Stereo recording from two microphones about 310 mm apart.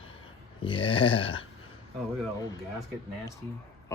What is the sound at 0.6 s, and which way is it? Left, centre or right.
Speech, centre.